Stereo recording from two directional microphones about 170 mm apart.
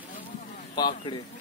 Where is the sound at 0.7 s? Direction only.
25° left (ahead or behind).